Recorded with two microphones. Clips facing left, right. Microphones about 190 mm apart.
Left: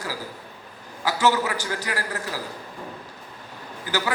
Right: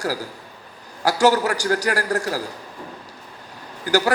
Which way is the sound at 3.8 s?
45° right (ahead or behind).